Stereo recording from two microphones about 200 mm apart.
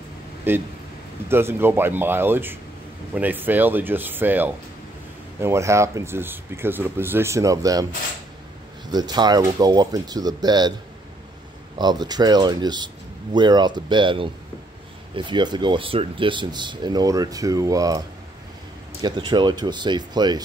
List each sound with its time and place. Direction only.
0.5 s speech: 10° right (ahead or behind)
8.9 s speech: 20° right (ahead or behind)
11.8 s speech: 20° right (ahead or behind)